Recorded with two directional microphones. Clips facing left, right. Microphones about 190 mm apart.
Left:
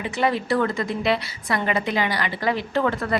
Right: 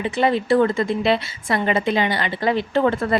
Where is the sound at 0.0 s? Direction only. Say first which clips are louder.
Right 3 dB; 25° right (ahead or behind).